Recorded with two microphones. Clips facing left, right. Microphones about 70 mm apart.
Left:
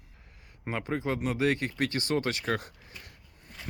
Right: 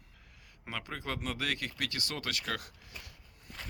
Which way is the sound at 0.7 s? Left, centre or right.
Left.